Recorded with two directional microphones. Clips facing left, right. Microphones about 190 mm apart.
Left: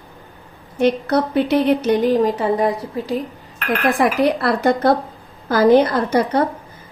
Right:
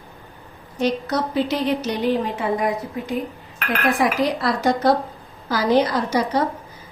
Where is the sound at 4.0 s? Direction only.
60° left (ahead or behind).